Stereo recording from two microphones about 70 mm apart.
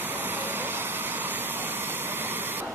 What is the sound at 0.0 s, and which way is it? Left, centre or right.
Vehicle, right.